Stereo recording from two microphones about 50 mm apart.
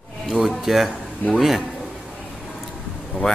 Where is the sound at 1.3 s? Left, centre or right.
Centre.